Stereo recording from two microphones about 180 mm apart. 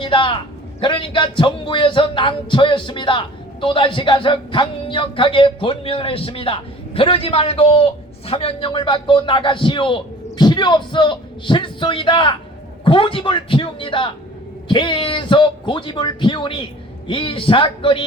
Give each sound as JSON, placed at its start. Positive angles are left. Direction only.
{"t": 0.0, "sound": "a man's voice", "side_deg": 30}